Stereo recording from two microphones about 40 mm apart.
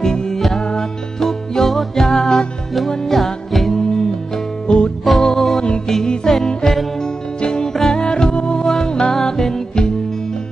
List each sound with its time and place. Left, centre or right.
0.0 s music: centre
1.2 s music: centre
4.6 s music: left
5.3 s music: centre
7.0 s music: centre